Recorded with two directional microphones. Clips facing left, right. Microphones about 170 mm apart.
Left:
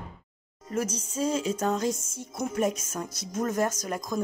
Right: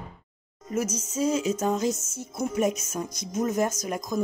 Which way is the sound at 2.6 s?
10° right (ahead or behind).